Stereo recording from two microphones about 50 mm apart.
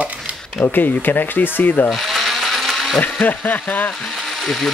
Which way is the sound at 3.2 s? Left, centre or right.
Left.